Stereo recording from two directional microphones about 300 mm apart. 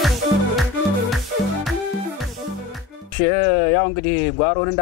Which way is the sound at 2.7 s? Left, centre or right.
Centre.